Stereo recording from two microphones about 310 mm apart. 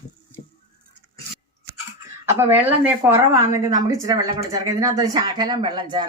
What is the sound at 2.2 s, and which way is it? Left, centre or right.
A woman's voice, centre.